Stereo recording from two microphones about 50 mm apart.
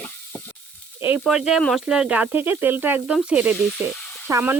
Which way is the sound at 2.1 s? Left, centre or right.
Right.